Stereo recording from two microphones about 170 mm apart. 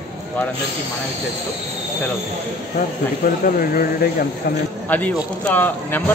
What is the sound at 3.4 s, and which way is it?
Speech, 60° left (ahead or behind).